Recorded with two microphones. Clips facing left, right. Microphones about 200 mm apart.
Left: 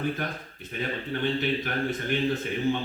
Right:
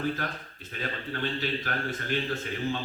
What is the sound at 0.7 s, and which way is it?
A man's voice, 20° left (ahead or behind).